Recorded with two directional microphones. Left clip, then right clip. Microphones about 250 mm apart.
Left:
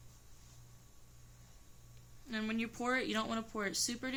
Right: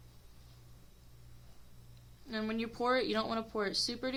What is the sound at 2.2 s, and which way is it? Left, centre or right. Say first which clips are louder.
Speech: right 2 dB; centre.